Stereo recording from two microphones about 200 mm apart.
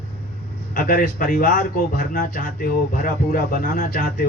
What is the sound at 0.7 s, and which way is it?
Speech, 45° left (ahead or behind).